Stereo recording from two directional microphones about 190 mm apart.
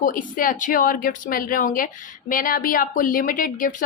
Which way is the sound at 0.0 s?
45° left (ahead or behind).